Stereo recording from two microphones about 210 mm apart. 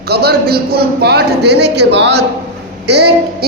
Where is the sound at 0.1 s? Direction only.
50° right (ahead or behind).